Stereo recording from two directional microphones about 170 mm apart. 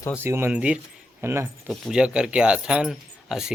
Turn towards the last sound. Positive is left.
turn(degrees=-5)  # may be behind; listen again after turning